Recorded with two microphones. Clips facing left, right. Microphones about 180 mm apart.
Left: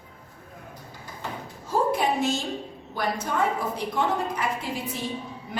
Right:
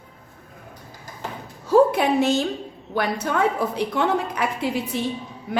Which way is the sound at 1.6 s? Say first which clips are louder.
Right 7 dB; 70° right (ahead or behind).